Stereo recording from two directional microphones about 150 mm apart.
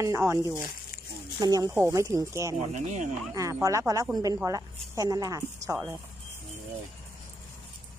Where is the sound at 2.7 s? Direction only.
55° right (ahead or behind).